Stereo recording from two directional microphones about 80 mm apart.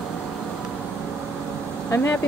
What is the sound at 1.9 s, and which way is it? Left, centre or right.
Speech, left.